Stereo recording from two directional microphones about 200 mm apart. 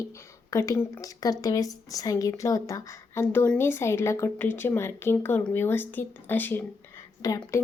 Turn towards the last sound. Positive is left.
turn(degrees=15)  # may be behind; listen again after turning